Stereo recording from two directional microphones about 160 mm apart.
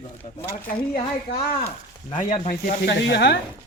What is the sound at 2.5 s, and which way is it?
Speech, 65° left (ahead or behind).